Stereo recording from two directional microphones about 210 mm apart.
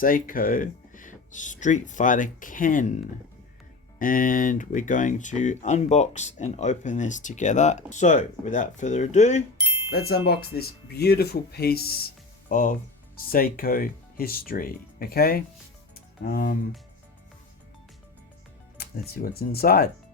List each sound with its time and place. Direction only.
0.0 s speech: 40° left (ahead or behind)
9.9 s speech: 50° left (ahead or behind)
18.8 s speech: 45° left (ahead or behind)